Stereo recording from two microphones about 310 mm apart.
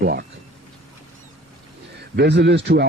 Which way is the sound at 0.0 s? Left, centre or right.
Right.